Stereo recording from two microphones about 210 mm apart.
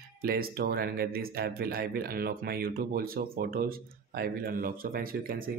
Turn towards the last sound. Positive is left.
turn(degrees=-45)  # may be behind; listen again after turning